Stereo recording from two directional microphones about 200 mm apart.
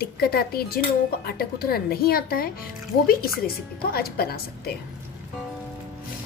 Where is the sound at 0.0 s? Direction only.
50° left (ahead or behind).